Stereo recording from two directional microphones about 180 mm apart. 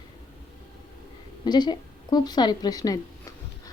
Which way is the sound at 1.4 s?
25° left (ahead or behind).